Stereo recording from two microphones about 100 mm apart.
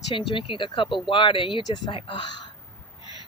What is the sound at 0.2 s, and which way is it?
Speech, 60° left (ahead or behind).